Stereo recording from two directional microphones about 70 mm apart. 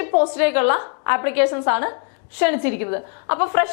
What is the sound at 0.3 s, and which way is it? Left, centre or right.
A woman's voice, centre.